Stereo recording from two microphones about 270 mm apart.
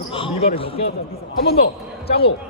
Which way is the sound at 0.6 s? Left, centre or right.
Centre.